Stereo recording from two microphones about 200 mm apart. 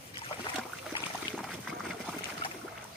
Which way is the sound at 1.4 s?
Centre (ahead or behind).